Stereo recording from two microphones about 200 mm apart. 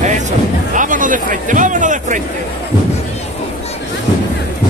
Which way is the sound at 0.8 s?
40° right (ahead or behind).